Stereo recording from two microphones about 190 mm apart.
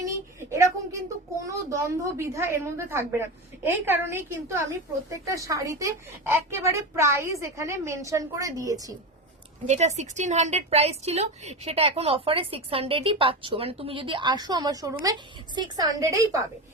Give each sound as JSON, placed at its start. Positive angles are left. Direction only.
{"t": 0.0, "sound": "a woman's voice", "side_deg": -15}
{"t": 9.6, "sound": "a woman's voice", "side_deg": -35}